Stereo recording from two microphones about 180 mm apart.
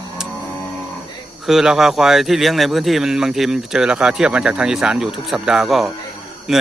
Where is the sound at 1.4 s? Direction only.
Centre (ahead or behind).